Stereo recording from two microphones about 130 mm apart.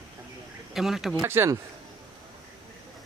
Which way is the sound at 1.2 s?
20° right (ahead or behind).